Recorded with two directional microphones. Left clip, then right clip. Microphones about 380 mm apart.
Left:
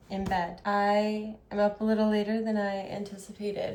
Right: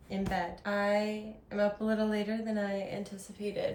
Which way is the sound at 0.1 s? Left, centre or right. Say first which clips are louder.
Left 4 dB; centre.